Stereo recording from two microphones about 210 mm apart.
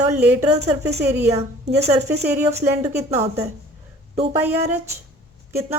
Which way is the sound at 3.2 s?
30° right (ahead or behind).